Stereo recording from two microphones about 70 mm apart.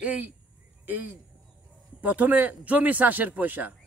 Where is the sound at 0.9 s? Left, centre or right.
Right.